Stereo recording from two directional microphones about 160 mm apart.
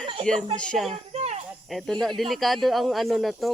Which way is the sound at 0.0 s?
35° right (ahead or behind).